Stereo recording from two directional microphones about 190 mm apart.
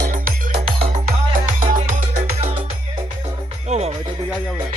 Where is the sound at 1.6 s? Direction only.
40° right (ahead or behind).